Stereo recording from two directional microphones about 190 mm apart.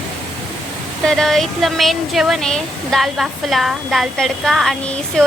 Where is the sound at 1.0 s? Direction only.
Centre (ahead or behind).